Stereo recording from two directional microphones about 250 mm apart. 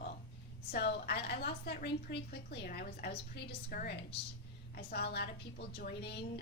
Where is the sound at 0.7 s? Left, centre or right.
Left.